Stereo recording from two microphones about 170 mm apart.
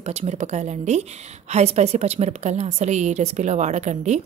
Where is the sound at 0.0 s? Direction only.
40° right (ahead or behind).